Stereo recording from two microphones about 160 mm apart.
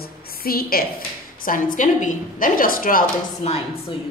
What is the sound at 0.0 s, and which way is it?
A woman's voice, 70° left (ahead or behind).